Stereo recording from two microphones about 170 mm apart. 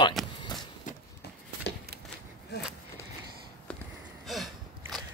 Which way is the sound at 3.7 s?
5° left (ahead or behind).